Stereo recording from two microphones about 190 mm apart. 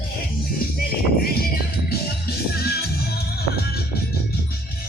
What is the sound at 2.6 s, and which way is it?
Music, 55° left (ahead or behind).